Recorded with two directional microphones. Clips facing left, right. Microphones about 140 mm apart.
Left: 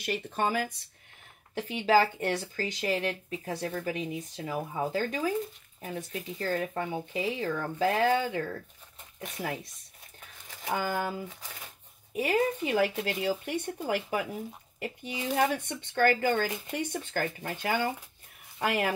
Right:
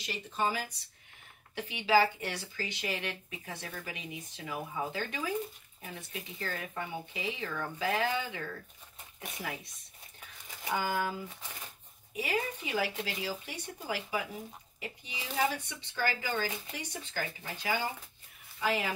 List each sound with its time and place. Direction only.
0.0 s speech: 55° left (ahead or behind)
10.8 s speech: 50° left (ahead or behind)
11.2 s speech: centre (ahead or behind)
12.1 s speech: 50° left (ahead or behind)